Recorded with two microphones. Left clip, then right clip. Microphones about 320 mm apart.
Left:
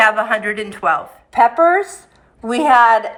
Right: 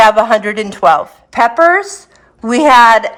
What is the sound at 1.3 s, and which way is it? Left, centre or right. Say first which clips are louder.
Speech: right 3 dB; right.